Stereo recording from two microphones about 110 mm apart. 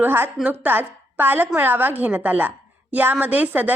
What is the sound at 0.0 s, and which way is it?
A woman's voice, 20° right (ahead or behind).